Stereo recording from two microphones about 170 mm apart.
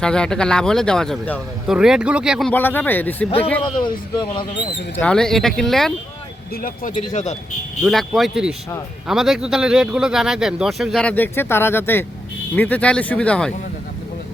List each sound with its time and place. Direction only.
0.0 s speech: 5° left (ahead or behind)
2.5 s speech: 10° left (ahead or behind)
3.2 s speech: 35° left (ahead or behind)
4.9 s speech: 5° left (ahead or behind)
6.5 s speech: 55° left (ahead or behind)
7.9 s speech: centre (ahead or behind)